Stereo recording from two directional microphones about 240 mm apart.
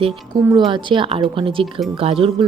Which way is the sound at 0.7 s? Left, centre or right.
Right.